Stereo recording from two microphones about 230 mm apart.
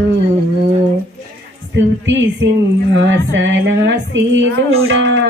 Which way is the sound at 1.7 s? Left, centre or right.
Right.